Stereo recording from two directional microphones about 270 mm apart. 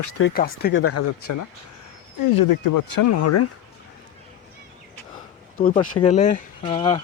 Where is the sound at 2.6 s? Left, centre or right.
Left.